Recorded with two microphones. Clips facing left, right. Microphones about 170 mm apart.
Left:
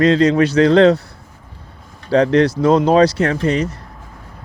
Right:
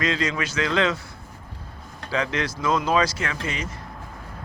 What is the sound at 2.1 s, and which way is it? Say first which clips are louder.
Speech: left 13 dB; 35° left (ahead or behind).